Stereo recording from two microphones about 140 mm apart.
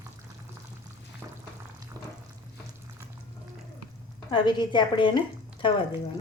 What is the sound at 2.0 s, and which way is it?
Frying, 15° left (ahead or behind).